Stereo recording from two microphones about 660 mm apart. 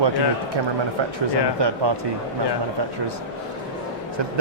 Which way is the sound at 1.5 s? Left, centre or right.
Right.